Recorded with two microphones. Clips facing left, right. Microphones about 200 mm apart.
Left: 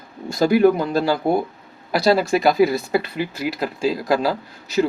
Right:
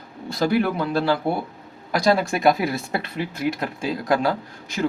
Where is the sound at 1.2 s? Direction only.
15° left (ahead or behind).